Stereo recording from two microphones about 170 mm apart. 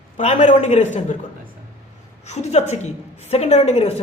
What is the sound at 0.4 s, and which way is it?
Speech, 45° left (ahead or behind).